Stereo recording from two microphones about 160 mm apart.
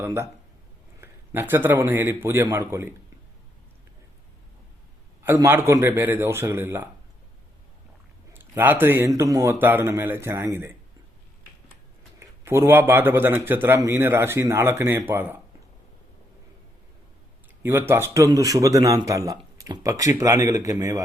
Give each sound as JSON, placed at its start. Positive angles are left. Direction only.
{"t": 0.0, "sound": "speech", "side_deg": -15}
{"t": 5.2, "sound": "speech", "side_deg": -15}
{"t": 8.3, "sound": "speech", "side_deg": -10}
{"t": 12.2, "sound": "speech", "side_deg": -15}
{"t": 17.6, "sound": "a man's voice", "side_deg": -15}